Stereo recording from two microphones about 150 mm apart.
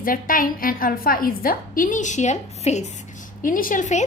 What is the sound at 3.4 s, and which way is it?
Speech, 65° left (ahead or behind).